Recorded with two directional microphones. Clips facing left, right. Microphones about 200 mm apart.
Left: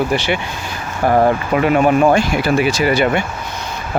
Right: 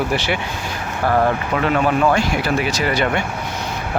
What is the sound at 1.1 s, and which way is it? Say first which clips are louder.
Speech: left 4 dB; 20° left (ahead or behind).